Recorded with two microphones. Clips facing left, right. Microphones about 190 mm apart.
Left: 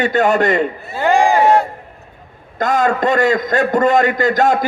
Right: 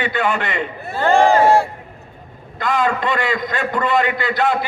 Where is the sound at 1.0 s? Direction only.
15° left (ahead or behind).